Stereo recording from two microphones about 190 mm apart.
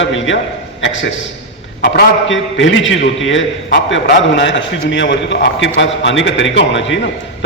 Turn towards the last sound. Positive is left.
turn(degrees=75)  # may be behind; listen again after turning